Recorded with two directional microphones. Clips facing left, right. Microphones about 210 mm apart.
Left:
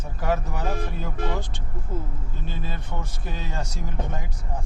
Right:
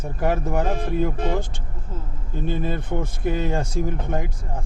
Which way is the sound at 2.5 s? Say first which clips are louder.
Right 10 dB; 55° right (ahead or behind).